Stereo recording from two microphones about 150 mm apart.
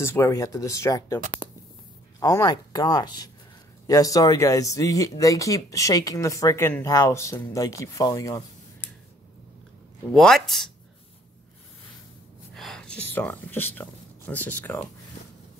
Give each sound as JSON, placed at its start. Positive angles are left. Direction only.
{"t": 0.0, "sound": "speech", "side_deg": 20}
{"t": 10.1, "sound": "speech", "side_deg": 0}
{"t": 12.5, "sound": "speech", "side_deg": 5}